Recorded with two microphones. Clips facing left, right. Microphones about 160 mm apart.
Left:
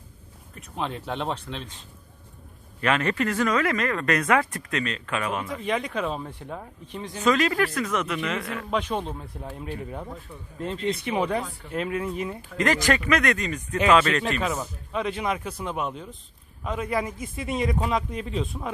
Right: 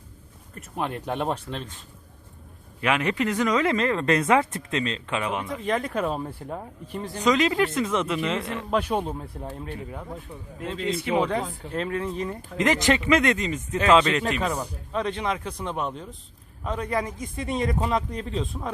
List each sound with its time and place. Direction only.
1.0 s speech: 10° right (ahead or behind)
2.8 s speech: 15° right (ahead or behind)
5.5 s speech: centre (ahead or behind)
7.2 s speech: 20° right (ahead or behind)
8.7 s speech: 10° right (ahead or behind)
11.1 s speech: 25° right (ahead or behind)
11.7 s speech: 10° left (ahead or behind)
12.5 s speech: 20° right (ahead or behind)
14.9 s speech: 5° left (ahead or behind)